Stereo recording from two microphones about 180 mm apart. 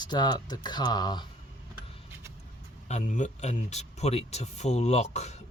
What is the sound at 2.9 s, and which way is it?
Speech, 45° left (ahead or behind).